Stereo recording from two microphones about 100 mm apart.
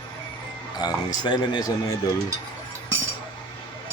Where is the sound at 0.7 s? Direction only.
45° left (ahead or behind).